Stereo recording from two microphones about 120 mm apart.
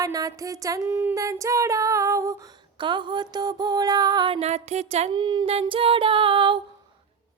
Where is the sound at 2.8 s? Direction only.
40° right (ahead or behind).